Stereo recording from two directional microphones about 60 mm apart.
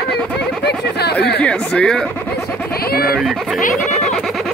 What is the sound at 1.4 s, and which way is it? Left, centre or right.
Speech, centre.